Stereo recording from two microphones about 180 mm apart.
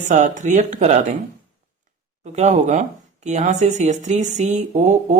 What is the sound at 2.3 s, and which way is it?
Speech, 40° right (ahead or behind).